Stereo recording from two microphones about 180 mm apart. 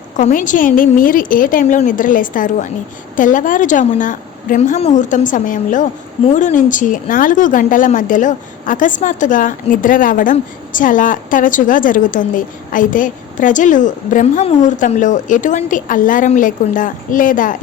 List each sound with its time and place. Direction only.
0.2 s a woman's voice: 45° left (ahead or behind)